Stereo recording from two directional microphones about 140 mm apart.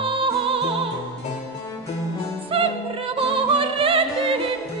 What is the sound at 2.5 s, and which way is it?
Music, 40° right (ahead or behind).